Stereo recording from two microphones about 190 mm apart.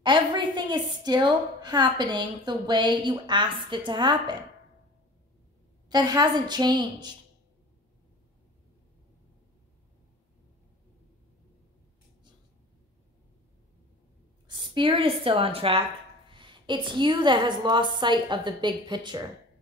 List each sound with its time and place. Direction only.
0.0 s a woman's voice: 25° right (ahead or behind)
5.9 s a woman's voice: 20° right (ahead or behind)
14.5 s a woman's voice: 25° right (ahead or behind)